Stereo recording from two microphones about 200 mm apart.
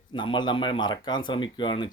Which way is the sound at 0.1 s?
25° left (ahead or behind).